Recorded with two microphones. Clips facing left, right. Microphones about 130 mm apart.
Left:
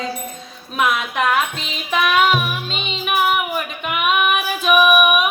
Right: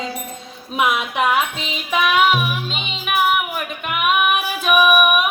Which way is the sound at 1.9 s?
10° right (ahead or behind).